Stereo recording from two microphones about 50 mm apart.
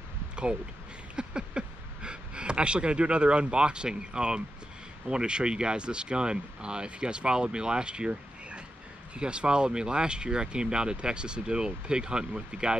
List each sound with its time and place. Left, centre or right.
1.1 s speech: centre